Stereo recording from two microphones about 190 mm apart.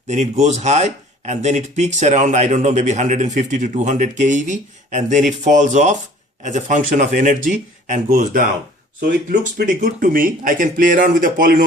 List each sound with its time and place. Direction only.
0.1 s speech: 35° right (ahead or behind)